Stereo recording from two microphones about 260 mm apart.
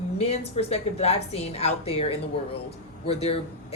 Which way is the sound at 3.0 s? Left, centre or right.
Left.